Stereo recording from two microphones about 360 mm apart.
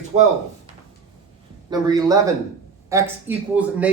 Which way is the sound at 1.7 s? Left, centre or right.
Centre.